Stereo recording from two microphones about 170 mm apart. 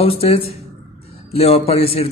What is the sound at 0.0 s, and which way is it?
A man's voice, 35° left (ahead or behind).